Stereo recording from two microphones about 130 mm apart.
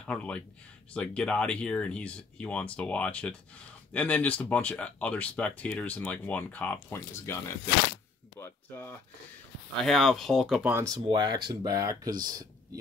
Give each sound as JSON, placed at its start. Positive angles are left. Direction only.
{"t": 0.0, "sound": "speech", "side_deg": 10}
{"t": 8.4, "sound": "a sound", "side_deg": 15}
{"t": 9.8, "sound": "speech", "side_deg": 0}
{"t": 11.1, "sound": "speech", "side_deg": -35}